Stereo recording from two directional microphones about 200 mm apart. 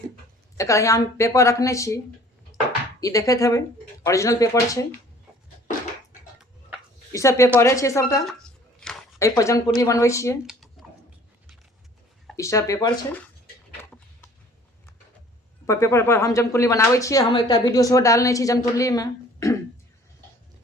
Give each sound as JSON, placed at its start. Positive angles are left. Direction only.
{"t": 0.5, "sound": "speech", "side_deg": 15}
{"t": 3.0, "sound": "speech", "side_deg": 15}
{"t": 7.1, "sound": "speech", "side_deg": 15}
{"t": 10.8, "sound": "a sound", "side_deg": 0}
{"t": 12.4, "sound": "speech", "side_deg": 15}
{"t": 15.6, "sound": "speech", "side_deg": 15}